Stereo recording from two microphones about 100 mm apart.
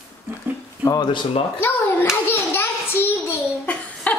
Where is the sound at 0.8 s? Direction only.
35° left (ahead or behind).